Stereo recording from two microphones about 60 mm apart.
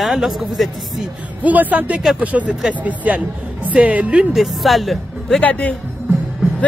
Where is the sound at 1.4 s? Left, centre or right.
Right.